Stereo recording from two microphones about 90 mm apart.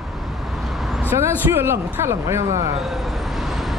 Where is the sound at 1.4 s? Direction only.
25° right (ahead or behind).